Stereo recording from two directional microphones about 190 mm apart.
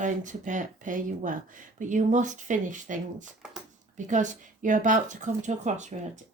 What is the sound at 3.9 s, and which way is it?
A woman's voice, 40° right (ahead or behind).